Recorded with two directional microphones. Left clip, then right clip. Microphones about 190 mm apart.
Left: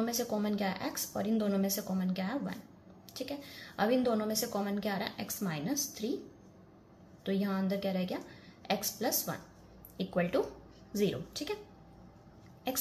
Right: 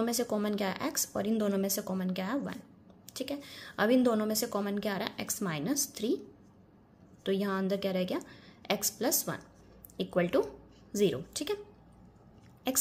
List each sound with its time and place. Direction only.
0.0 s a woman's voice: 35° right (ahead or behind)
7.2 s a woman's voice: 40° right (ahead or behind)